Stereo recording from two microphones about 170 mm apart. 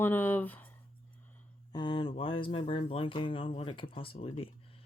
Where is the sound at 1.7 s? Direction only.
25° left (ahead or behind).